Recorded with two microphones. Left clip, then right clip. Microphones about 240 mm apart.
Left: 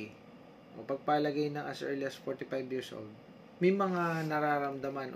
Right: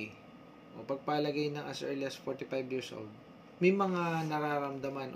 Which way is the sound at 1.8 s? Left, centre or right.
Centre.